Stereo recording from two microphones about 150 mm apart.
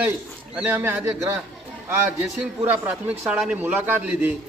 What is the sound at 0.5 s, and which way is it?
Speech, 15° right (ahead or behind).